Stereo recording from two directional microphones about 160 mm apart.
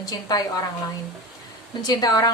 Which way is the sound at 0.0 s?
25° left (ahead or behind).